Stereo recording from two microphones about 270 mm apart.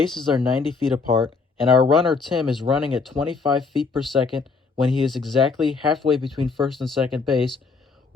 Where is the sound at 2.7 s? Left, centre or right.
Centre.